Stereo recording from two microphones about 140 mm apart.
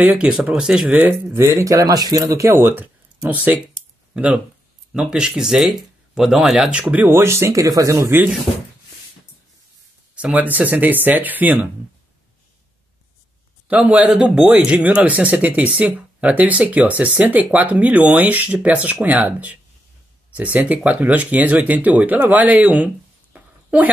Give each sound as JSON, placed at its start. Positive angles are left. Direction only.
{"t": 0.0, "sound": "speech", "side_deg": -5}
{"t": 10.1, "sound": "speech", "side_deg": -10}
{"t": 13.7, "sound": "speech", "side_deg": -10}
{"t": 23.3, "sound": "a sound", "side_deg": -10}